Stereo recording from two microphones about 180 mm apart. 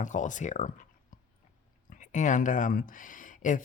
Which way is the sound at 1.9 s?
45° left (ahead or behind).